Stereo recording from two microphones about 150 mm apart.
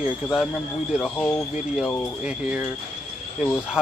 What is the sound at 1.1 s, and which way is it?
Speech, 15° left (ahead or behind).